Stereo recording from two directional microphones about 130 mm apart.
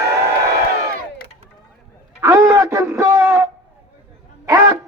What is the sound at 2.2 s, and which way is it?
Speech, 20° right (ahead or behind).